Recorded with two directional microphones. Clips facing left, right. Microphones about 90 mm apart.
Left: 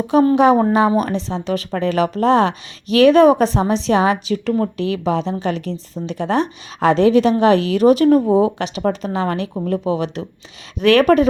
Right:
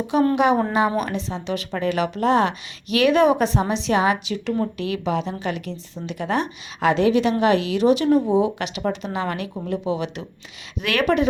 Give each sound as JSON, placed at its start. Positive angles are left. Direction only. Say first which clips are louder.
{"t": 0.3, "sound": "speech", "louder": "left 6 dB", "side_deg": 35}